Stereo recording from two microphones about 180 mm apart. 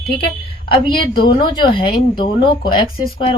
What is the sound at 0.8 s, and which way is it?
Speech, 25° left (ahead or behind).